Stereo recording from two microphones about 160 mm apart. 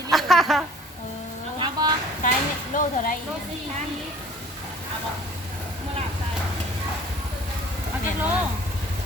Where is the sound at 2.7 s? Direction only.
55° left (ahead or behind).